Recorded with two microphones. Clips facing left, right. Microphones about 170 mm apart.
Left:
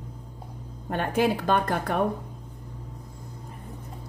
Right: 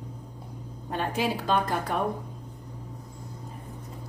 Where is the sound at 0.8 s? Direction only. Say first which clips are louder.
Left 4 dB; 55° left (ahead or behind).